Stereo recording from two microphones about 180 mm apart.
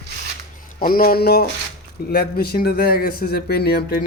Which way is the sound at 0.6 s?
50° left (ahead or behind).